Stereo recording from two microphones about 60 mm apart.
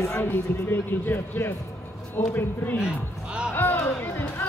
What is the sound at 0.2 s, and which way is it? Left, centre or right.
A man's voice, left.